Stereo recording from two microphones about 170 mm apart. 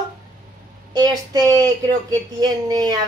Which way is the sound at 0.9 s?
25° right (ahead or behind).